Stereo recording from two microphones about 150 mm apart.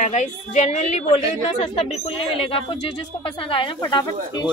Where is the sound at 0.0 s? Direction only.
50° left (ahead or behind).